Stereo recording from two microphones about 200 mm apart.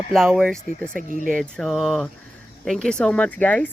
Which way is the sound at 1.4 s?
Centre (ahead or behind).